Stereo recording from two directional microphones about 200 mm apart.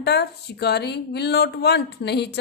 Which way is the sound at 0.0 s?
55° left (ahead or behind).